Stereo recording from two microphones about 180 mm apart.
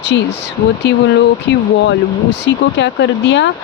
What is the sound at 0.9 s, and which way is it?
Speech, 70° left (ahead or behind).